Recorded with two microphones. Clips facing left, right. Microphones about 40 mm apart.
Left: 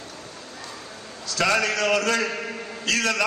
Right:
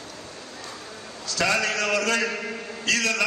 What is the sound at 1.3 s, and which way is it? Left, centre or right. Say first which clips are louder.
A man's voice: left 2 dB; left.